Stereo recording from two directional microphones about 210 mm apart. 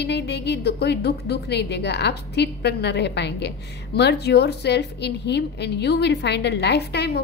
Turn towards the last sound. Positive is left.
turn(degrees=50)  # may be behind; listen again after turning